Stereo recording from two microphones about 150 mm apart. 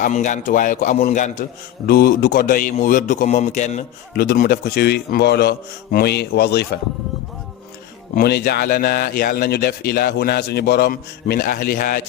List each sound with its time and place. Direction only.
0.0 s a man's voice: 55° left (ahead or behind)
1.9 s a man's voice: 80° left; by 3.8 s 50° left (ahead or behind)
4.1 s a man's voice: 85° left
8.1 s a man's voice: 90° left